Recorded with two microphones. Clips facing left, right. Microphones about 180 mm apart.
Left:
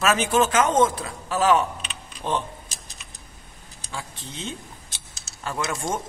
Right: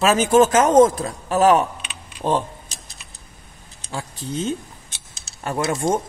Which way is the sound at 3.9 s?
40° right (ahead or behind).